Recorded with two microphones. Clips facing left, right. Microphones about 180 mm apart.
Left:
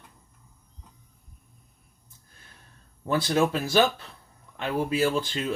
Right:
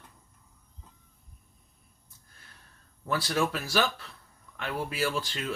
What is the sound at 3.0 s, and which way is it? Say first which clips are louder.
Speech: left 5 dB; 20° left (ahead or behind).